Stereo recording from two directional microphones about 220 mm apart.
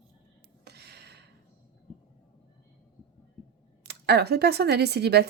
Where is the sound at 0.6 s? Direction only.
50° right (ahead or behind).